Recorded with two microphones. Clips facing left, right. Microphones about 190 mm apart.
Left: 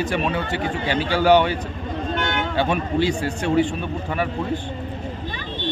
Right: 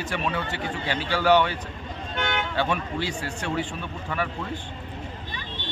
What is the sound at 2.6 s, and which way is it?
A man's voice, 15° left (ahead or behind).